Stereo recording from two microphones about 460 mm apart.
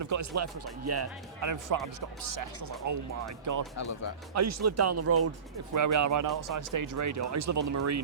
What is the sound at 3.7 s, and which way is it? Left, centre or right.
Speech, left.